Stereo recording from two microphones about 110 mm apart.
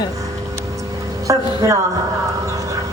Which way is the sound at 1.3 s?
30° right (ahead or behind).